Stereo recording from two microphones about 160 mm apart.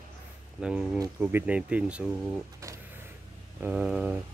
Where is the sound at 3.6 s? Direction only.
5° right (ahead or behind).